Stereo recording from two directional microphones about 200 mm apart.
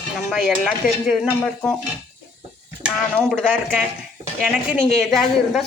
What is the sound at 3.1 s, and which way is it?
Speech, 5° left (ahead or behind).